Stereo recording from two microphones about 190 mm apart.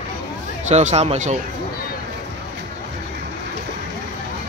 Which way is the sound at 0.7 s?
35° right (ahead or behind).